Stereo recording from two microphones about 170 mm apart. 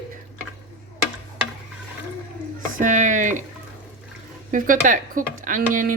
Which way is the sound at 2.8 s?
50° right (ahead or behind).